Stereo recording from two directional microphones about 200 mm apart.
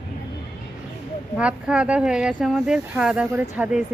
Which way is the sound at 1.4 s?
5° right (ahead or behind).